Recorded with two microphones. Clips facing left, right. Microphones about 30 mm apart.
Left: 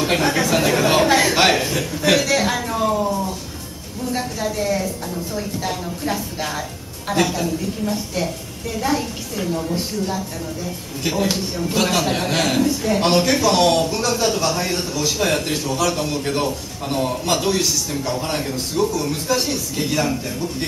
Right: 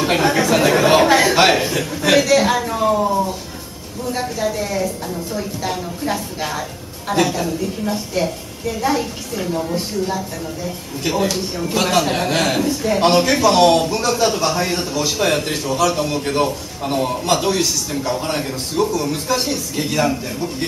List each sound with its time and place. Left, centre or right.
0.0 s a man's voice: centre
2.9 s a man's voice: centre
11.3 s a man's voice: centre